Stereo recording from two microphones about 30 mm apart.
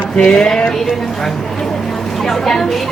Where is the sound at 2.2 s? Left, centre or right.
Centre.